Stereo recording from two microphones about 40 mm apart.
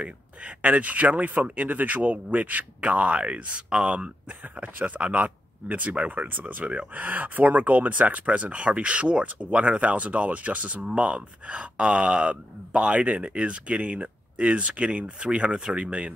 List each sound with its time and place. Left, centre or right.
0.0 s speech: right